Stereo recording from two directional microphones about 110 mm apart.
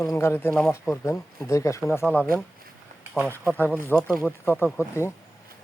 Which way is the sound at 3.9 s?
15° left (ahead or behind).